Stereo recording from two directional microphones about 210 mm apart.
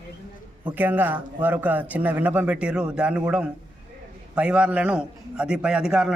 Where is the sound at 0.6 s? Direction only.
10° right (ahead or behind).